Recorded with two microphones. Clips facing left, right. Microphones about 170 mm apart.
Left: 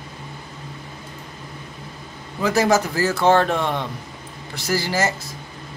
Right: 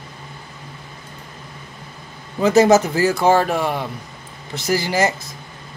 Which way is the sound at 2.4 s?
20° right (ahead or behind).